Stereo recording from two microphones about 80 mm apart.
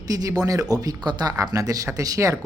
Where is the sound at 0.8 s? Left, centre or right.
Right.